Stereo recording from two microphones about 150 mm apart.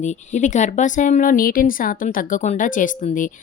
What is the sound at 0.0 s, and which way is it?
A woman's voice, 50° left (ahead or behind).